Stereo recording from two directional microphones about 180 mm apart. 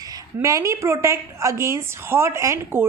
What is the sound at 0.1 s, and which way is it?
A woman's voice, 20° right (ahead or behind).